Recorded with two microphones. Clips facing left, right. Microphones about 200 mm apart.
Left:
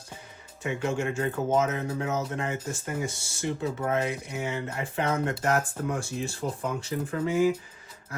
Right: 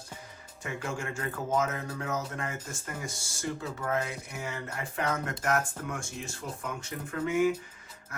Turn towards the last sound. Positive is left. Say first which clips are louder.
# left 3 dB
turn(degrees=35)  # may be behind; listen again after turning